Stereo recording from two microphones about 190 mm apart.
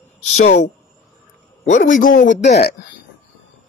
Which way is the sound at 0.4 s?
40° left (ahead or behind).